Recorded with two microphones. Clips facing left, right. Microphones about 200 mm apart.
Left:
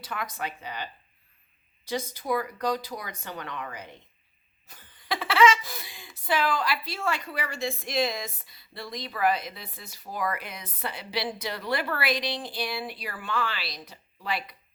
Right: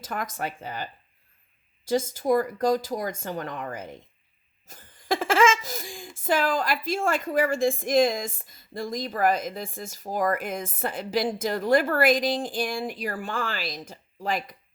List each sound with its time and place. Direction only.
0.0 s speech: 45° right (ahead or behind)
1.9 s speech: 45° right (ahead or behind)